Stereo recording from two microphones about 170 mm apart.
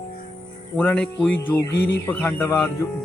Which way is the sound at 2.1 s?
10° left (ahead or behind).